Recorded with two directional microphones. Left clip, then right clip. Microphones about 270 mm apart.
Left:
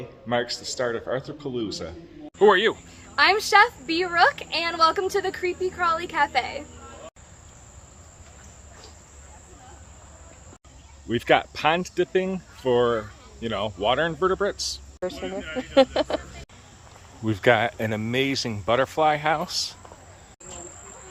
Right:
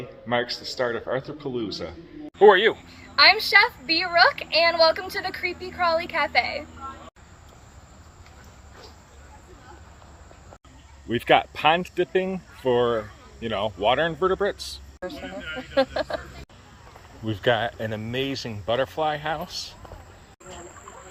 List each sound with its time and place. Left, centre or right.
0.3 s speech: centre
11.1 s speech: centre
15.0 s speech: left
17.2 s speech: centre